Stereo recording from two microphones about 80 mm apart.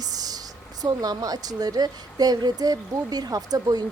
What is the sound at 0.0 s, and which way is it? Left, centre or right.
Speech, right.